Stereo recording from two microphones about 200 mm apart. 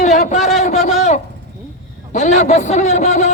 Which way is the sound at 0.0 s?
35° left (ahead or behind).